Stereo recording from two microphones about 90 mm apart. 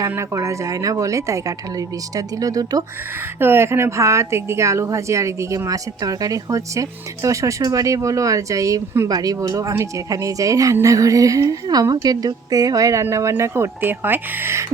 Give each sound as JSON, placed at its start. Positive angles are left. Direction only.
{"t": 0.0, "sound": "speech", "side_deg": -35}
{"t": 3.4, "sound": "speech", "side_deg": -25}